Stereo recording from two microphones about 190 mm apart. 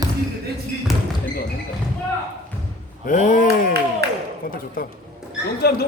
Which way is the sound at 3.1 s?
45° left (ahead or behind).